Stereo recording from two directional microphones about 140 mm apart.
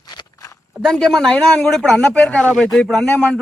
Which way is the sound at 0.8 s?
5° left (ahead or behind).